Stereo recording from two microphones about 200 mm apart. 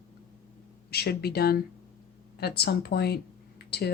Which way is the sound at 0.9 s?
50° left (ahead or behind).